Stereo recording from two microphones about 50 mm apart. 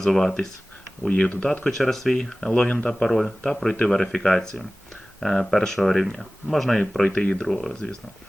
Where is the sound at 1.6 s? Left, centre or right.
Centre.